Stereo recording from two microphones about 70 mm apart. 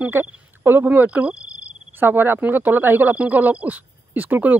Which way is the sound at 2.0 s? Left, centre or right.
Right.